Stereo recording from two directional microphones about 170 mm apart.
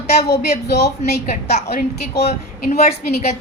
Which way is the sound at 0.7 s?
75° left (ahead or behind).